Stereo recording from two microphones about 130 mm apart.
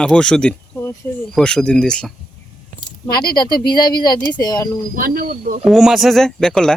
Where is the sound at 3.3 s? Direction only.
35° left (ahead or behind).